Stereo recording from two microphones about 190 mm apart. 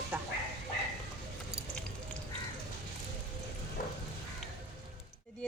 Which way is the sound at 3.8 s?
50° left (ahead or behind).